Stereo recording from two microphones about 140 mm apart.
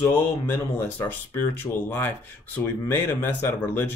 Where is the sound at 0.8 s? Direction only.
15° left (ahead or behind).